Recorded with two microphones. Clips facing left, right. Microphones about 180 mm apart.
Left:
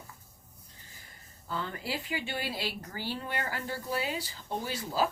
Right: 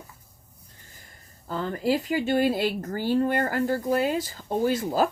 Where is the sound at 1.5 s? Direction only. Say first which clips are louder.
Right 10 dB; 40° right (ahead or behind).